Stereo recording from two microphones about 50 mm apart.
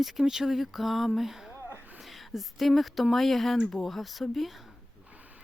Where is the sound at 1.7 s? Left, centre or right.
Right.